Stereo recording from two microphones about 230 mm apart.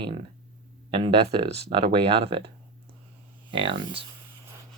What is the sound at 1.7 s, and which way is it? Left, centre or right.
Speech, right.